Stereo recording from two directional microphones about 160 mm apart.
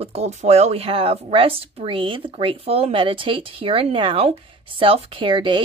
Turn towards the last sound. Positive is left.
turn(degrees=-30)  # may be behind; listen again after turning